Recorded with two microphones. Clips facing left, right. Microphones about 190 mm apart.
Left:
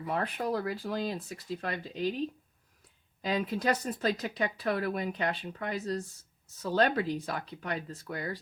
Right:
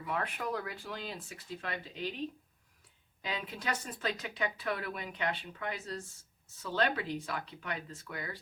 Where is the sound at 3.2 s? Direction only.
40° left (ahead or behind).